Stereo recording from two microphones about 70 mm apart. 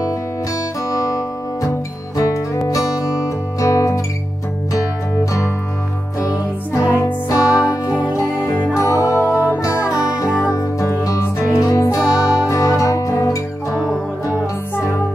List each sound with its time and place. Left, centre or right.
0.8 s music: left
7.2 s music: left
9.9 s music: left